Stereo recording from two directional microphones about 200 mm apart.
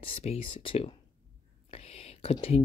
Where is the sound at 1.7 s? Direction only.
30° left (ahead or behind).